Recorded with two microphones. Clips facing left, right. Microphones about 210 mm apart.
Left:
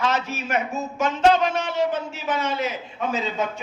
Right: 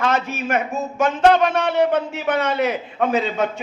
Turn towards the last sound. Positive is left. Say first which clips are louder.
# right 5 dB
turn(degrees=-60)  # may be behind; listen again after turning